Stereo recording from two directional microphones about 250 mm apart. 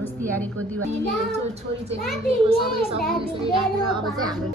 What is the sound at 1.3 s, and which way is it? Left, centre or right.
Speech, right.